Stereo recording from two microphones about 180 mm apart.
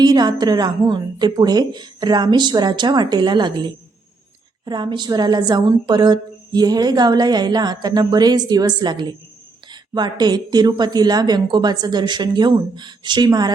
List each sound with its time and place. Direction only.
0.0 s a woman's voice: 20° right (ahead or behind)